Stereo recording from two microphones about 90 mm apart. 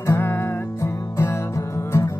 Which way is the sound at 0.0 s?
25° left (ahead or behind).